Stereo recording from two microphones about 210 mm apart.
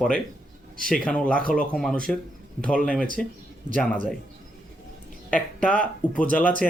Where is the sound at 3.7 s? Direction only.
35° right (ahead or behind).